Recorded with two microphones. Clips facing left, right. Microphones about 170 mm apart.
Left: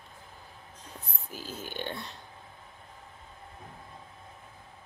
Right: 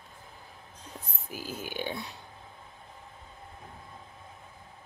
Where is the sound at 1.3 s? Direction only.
10° right (ahead or behind).